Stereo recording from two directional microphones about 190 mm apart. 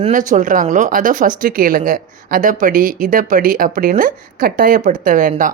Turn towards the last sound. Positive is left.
turn(degrees=-45)  # may be behind; listen again after turning